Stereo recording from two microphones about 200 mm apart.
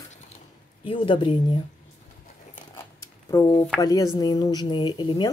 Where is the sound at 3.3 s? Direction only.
15° left (ahead or behind).